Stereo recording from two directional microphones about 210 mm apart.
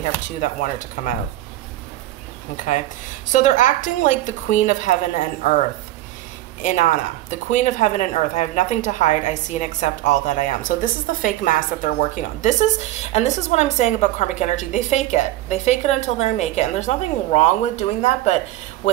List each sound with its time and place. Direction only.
0.4 s a woman's voice: 40° left (ahead or behind)
2.5 s a woman's voice: 35° left (ahead or behind)